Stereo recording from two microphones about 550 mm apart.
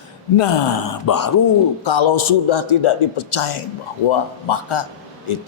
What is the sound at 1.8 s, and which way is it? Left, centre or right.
A man's voice, left.